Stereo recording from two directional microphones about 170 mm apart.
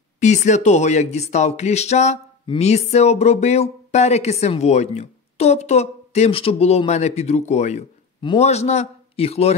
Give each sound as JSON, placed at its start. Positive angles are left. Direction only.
{"t": 0.2, "sound": "speech", "side_deg": 45}